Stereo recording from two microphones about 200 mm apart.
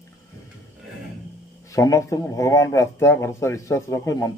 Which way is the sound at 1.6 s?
15° left (ahead or behind).